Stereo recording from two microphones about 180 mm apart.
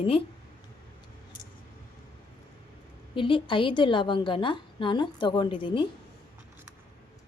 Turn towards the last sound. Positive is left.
turn(degrees=30)  # may be behind; listen again after turning